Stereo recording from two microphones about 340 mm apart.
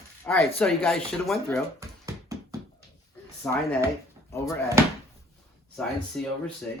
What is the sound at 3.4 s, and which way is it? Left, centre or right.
Speech, centre.